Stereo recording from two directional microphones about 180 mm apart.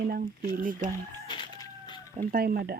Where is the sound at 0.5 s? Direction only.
50° right (ahead or behind).